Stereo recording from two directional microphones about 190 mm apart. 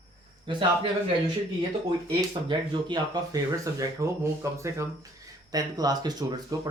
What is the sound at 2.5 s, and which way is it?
Speech, 25° right (ahead or behind).